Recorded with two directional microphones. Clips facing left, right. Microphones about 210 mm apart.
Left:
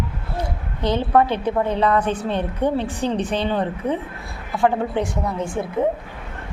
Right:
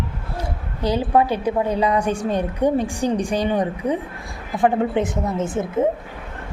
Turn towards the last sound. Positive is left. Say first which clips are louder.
# right 2 dB
turn(degrees=-20)  # may be behind; listen again after turning